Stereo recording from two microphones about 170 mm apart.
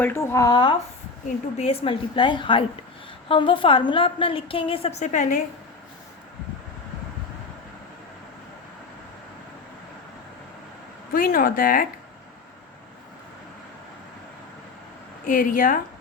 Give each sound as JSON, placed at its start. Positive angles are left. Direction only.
{"t": 0.0, "sound": "a woman's voice", "side_deg": 15}
{"t": 11.1, "sound": "speech", "side_deg": 55}
{"t": 15.3, "sound": "speech", "side_deg": 50}